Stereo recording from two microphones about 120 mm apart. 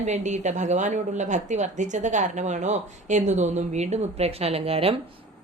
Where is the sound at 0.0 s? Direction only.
75° right (ahead or behind).